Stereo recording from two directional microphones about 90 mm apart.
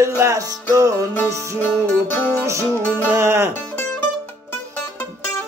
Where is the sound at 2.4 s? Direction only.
30° right (ahead or behind).